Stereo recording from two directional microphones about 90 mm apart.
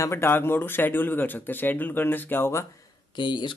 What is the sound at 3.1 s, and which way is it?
Speech, 60° left (ahead or behind).